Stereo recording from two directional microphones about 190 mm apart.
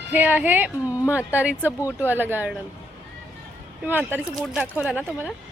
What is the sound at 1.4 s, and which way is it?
A woman's voice, 10° right (ahead or behind).